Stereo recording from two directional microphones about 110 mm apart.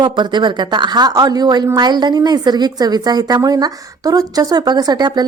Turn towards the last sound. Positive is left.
turn(degrees=-40)  # may be behind; listen again after turning